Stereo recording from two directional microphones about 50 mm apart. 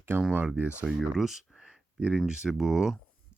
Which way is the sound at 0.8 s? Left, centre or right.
Centre.